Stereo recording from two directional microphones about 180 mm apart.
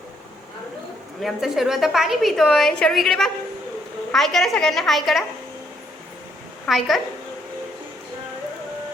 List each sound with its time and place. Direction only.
1.2 s a woman's voice: centre (ahead or behind)
6.7 s a woman's voice: centre (ahead or behind)